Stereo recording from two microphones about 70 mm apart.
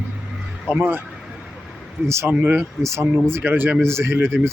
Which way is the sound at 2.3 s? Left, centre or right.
Right.